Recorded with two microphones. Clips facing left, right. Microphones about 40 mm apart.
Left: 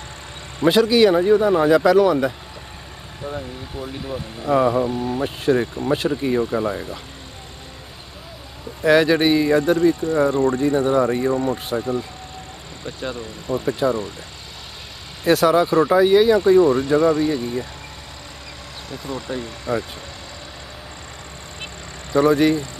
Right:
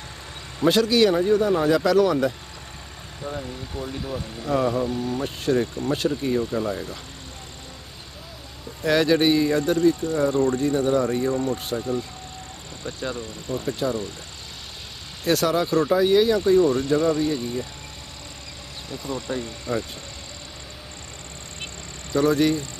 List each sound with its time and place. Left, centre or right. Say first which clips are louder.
0.6 s speech: left 4 dB; centre
8.8 s speech: left 4 dB; centre
15.2 s speech: left 6 dB; centre
19.2 s speech: left 2 dB; centre
22.1 s speech: left 4 dB; centre